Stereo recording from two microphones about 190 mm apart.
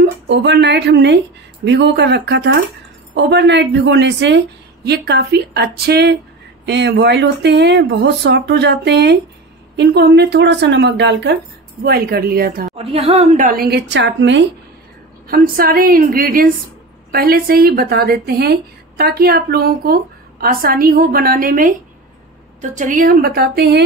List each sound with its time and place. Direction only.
0.0 s speech: 65° right (ahead or behind)
11.8 s a woman's voice: 55° right (ahead or behind)
12.7 s a woman's voice: 30° right (ahead or behind); by 14.5 s 70° right (ahead or behind)
15.2 s a woman's voice: 50° right (ahead or behind)